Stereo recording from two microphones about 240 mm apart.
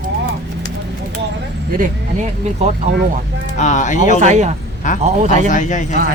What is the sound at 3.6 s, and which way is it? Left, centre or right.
Speech, left.